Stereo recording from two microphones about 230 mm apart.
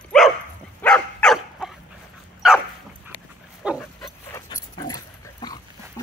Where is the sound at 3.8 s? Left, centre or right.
Centre.